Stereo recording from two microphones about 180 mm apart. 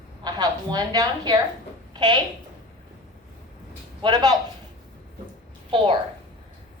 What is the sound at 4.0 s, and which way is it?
Speech, 20° right (ahead or behind).